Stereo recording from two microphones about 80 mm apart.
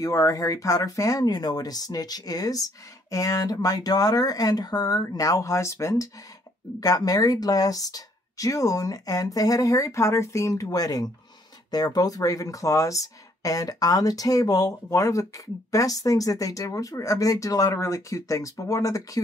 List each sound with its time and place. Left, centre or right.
0.0 s speech: left
6.8 s speech: left